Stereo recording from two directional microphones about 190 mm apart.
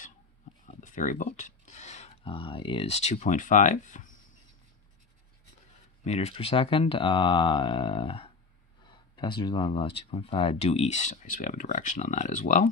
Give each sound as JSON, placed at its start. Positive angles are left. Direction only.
{"t": 0.7, "sound": "speech", "side_deg": 40}
{"t": 6.0, "sound": "speech", "side_deg": 35}